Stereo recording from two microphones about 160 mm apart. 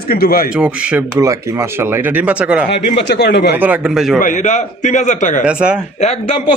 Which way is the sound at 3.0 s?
90° left.